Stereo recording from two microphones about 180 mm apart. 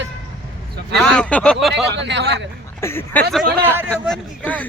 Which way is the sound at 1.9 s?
75° right (ahead or behind).